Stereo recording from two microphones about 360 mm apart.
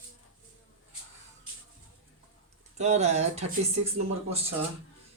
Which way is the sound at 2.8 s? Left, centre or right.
Centre.